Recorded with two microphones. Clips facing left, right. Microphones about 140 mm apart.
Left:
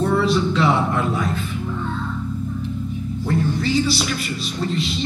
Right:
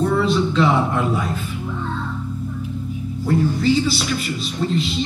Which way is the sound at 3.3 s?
Centre (ahead or behind).